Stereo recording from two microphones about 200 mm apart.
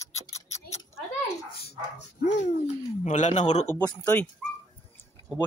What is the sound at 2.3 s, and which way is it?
Speech, 35° left (ahead or behind).